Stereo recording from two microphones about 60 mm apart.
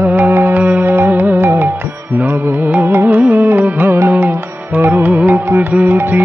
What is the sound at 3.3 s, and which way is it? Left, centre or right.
Music, right.